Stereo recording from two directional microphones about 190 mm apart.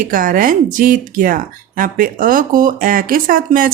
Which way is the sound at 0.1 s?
45° right (ahead or behind).